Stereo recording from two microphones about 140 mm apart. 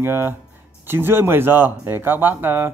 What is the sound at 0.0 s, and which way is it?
Speech, 15° right (ahead or behind).